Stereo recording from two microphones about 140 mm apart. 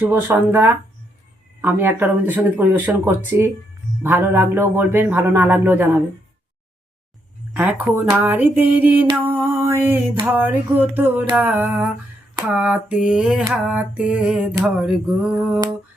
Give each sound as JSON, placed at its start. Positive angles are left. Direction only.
{"t": 0.0, "sound": "a man's voice", "side_deg": -15}
{"t": 7.5, "sound": "a man's voice", "side_deg": -10}
{"t": 9.2, "sound": "mantra", "side_deg": -15}
{"t": 10.2, "sound": "a man's voice", "side_deg": -15}
{"t": 13.1, "sound": "a sound", "side_deg": -5}
{"t": 13.5, "sound": "a man's voice", "side_deg": -10}
{"t": 14.8, "sound": "a sound", "side_deg": -5}